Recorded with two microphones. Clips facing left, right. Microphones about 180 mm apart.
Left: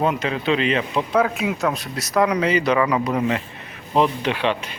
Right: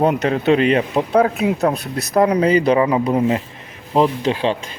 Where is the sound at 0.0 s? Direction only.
45° right (ahead or behind).